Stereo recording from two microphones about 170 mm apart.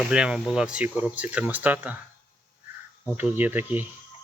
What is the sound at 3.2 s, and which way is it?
Speech, 10° right (ahead or behind).